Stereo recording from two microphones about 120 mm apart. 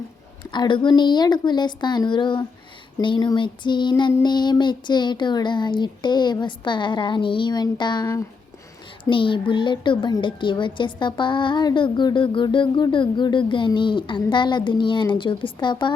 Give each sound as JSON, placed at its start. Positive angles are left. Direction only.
{"t": 0.5, "sound": "child singing", "side_deg": 40}
{"t": 9.0, "sound": "a woman's voice", "side_deg": 45}